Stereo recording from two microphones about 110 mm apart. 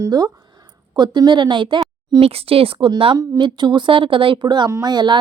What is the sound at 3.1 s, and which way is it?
A woman's voice, 40° right (ahead or behind).